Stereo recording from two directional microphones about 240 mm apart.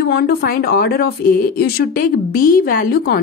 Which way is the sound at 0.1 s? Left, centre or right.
Left.